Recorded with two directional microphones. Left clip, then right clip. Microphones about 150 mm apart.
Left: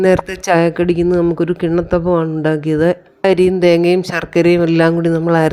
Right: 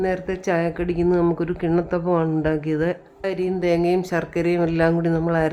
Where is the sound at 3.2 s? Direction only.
45° left (ahead or behind).